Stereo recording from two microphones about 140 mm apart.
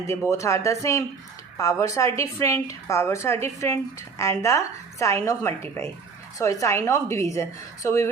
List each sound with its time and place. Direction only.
0.1 s a woman's voice: 20° left (ahead or behind)